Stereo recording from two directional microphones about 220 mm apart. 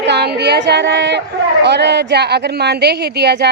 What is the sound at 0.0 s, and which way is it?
A woman's voice, 50° right (ahead or behind).